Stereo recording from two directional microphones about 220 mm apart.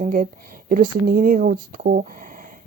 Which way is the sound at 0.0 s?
40° right (ahead or behind).